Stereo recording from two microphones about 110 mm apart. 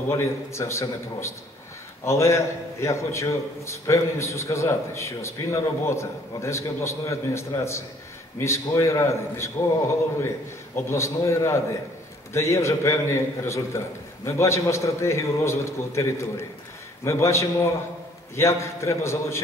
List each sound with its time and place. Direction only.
0.1 s a man's voice: 25° left (ahead or behind)
10.9 s a man's voice: 25° left (ahead or behind)